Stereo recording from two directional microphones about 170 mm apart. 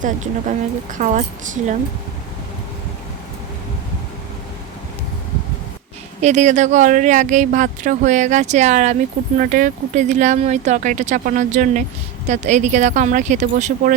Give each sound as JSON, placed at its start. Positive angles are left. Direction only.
{"t": 0.0, "sound": "speech", "side_deg": -50}
{"t": 6.2, "sound": "speech", "side_deg": -45}